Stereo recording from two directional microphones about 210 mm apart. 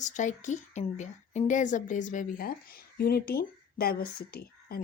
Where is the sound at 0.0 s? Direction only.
35° left (ahead or behind).